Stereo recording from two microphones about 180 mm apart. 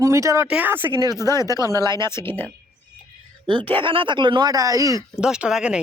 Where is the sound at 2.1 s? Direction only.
10° left (ahead or behind).